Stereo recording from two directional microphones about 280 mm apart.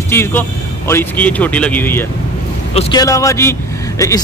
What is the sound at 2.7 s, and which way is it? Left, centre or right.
A man's voice, centre.